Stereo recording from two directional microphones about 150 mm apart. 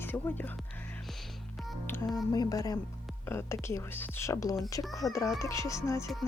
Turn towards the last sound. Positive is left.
turn(degrees=20)  # may be behind; listen again after turning